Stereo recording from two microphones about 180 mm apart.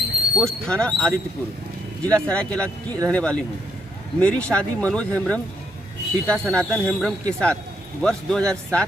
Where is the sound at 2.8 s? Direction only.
20° right (ahead or behind).